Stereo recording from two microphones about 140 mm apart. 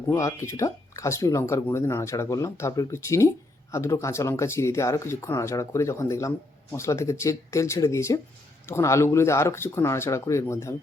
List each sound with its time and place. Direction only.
0.1 s speech: 20° left (ahead or behind)